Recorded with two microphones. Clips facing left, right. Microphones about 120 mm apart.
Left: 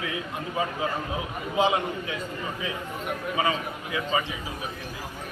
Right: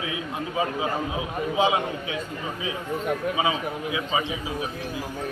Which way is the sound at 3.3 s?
10° right (ahead or behind).